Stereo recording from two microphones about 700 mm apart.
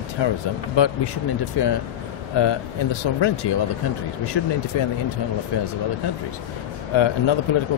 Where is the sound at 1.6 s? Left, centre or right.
Left.